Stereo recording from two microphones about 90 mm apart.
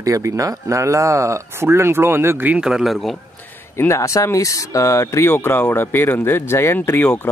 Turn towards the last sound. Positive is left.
turn(degrees=30)  # may be behind; listen again after turning